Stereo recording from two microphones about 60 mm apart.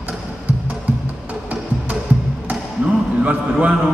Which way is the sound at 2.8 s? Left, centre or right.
Right.